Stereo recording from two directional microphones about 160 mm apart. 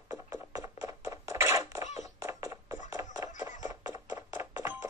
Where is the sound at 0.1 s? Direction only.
20° right (ahead or behind).